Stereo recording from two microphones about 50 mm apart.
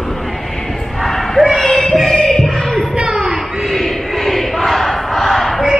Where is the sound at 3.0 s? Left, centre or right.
Right.